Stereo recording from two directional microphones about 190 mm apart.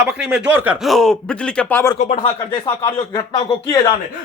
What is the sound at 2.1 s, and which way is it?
Speech, 30° left (ahead or behind).